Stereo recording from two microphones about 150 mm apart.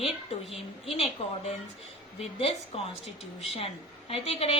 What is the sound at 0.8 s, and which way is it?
A woman's voice, 40° left (ahead or behind).